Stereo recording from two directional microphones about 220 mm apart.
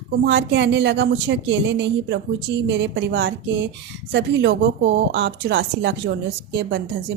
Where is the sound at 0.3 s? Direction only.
55° right (ahead or behind).